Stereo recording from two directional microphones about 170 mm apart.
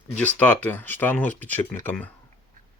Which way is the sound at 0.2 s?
10° left (ahead or behind).